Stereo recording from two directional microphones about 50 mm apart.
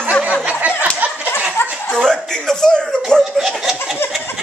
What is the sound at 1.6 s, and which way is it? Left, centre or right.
Chuckle, left.